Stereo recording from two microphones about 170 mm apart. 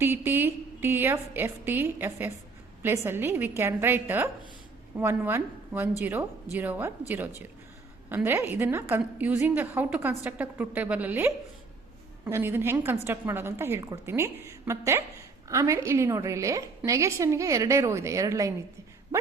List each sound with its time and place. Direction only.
0.0 s a woman's voice: 15° right (ahead or behind)